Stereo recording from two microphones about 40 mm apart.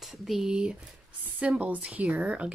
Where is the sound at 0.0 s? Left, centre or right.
Centre.